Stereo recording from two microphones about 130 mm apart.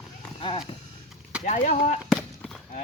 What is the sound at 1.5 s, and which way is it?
Speech, 80° left.